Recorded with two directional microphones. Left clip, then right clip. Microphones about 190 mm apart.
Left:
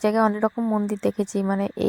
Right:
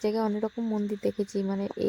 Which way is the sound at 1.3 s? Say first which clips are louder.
Left 6 dB; 20° left (ahead or behind).